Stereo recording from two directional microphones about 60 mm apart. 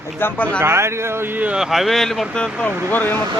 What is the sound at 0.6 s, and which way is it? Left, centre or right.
Speech, right.